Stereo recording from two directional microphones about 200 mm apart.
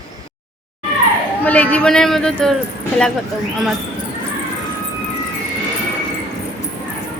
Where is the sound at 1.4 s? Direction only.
5° left (ahead or behind).